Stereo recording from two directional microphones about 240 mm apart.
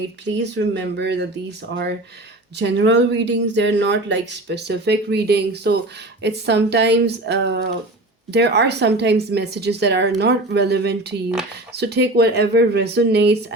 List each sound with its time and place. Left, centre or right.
0.5 s speech: right